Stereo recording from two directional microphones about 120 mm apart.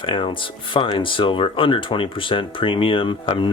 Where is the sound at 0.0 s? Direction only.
45° left (ahead or behind).